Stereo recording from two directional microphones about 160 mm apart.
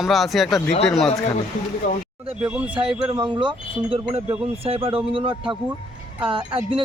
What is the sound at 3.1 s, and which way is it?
Speech, 30° right (ahead or behind).